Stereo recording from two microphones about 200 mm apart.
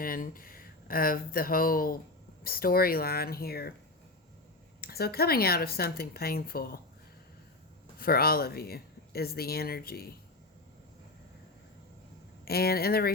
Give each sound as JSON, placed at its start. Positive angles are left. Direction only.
{"t": 0.0, "sound": "speech", "side_deg": 45}
{"t": 4.8, "sound": "speech", "side_deg": 50}
{"t": 7.9, "sound": "speech", "side_deg": 50}
{"t": 12.5, "sound": "speech", "side_deg": 50}